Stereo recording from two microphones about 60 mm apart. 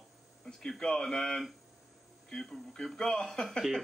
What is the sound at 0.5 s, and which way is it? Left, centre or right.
Speech, centre.